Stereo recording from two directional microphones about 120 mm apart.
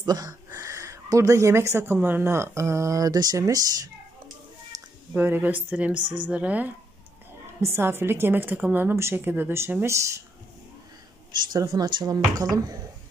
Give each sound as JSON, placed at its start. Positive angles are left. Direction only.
{"t": 0.0, "sound": "speech", "side_deg": -30}
{"t": 4.7, "sound": "a sound", "side_deg": -30}
{"t": 5.1, "sound": "speech", "side_deg": -15}
{"t": 5.9, "sound": "speech", "side_deg": -40}
{"t": 6.2, "sound": "speech", "side_deg": -10}
{"t": 11.7, "sound": "speech", "side_deg": -40}